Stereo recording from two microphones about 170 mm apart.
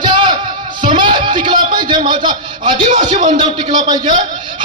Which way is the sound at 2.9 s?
45° right (ahead or behind).